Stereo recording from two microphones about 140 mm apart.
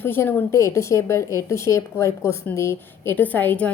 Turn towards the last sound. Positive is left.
turn(degrees=10)  # may be behind; listen again after turning